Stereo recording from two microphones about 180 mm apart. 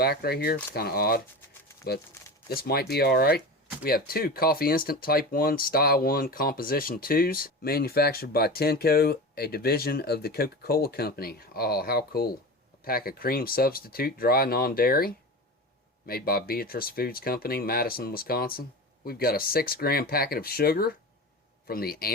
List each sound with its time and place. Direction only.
0.0 s speech: 60° left (ahead or behind)